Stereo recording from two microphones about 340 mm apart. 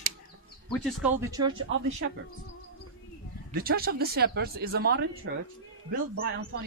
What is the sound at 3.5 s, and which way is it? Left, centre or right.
Speech, right.